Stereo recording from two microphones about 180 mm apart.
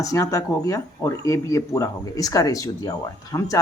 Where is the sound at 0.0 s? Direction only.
20° left (ahead or behind).